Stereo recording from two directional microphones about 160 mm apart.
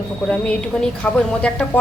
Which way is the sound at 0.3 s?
5° left (ahead or behind).